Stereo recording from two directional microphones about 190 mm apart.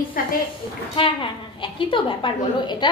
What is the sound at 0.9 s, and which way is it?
A woman's voice, 25° left (ahead or behind).